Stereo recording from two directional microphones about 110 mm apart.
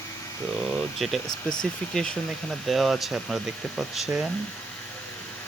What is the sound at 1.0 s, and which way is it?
Speech, 5° left (ahead or behind).